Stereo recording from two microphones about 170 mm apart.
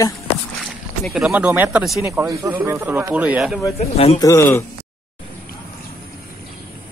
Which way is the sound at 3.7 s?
40° left (ahead or behind).